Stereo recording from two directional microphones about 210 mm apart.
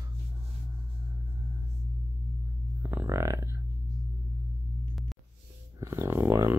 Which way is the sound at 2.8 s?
10° right (ahead or behind).